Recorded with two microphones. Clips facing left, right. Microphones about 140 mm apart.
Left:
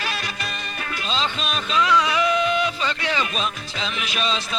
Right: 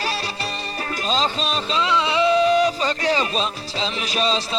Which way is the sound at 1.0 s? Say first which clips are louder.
Right 4 dB; 40° right (ahead or behind).